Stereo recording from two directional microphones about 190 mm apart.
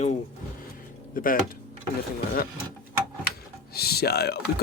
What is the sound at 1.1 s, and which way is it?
Speech, 45° left (ahead or behind).